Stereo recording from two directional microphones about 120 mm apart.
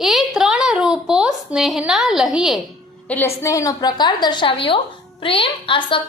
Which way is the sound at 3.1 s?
20° left (ahead or behind).